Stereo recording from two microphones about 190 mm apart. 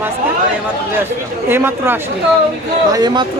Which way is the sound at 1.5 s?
10° right (ahead or behind).